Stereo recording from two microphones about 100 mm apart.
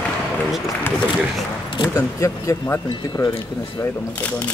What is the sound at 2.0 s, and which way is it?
Speech, 30° left (ahead or behind).